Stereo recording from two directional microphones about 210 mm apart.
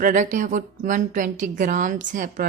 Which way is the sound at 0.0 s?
35° right (ahead or behind).